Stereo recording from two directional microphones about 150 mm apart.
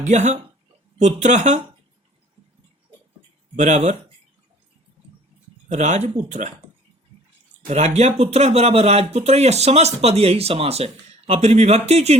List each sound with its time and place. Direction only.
0.0 s speech: 55° right (ahead or behind)
3.5 s speech: 50° right (ahead or behind)
5.6 s speech: 50° right (ahead or behind)
7.7 s speech: 45° right (ahead or behind)